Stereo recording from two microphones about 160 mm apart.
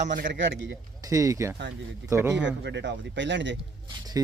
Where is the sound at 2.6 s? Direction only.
90° right.